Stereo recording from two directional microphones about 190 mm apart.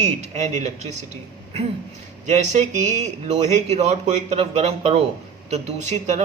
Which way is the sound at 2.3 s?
35° right (ahead or behind).